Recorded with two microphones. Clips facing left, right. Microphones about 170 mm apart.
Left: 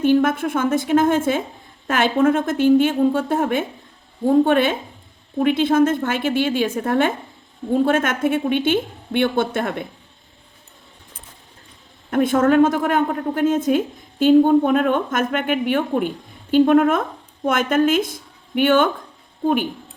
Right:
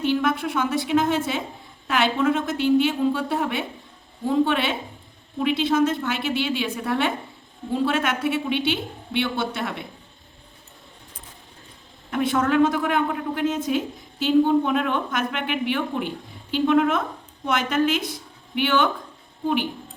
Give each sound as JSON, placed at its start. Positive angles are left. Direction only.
{"t": 0.0, "sound": "a woman's voice", "side_deg": 50}
{"t": 12.1, "sound": "a woman's voice", "side_deg": 50}